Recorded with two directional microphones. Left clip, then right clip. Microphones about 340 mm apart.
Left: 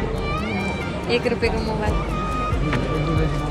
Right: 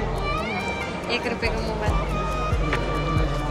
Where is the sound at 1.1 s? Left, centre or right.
Centre.